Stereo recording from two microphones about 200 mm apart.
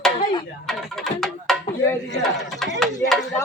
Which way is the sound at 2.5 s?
Centre (ahead or behind).